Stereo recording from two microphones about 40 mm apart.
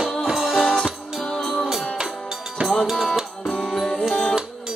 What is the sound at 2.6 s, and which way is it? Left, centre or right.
Music, right.